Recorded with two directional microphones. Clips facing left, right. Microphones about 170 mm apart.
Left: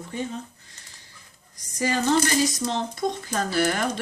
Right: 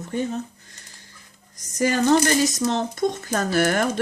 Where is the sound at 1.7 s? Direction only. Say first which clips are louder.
Right 4 dB; 45° right (ahead or behind).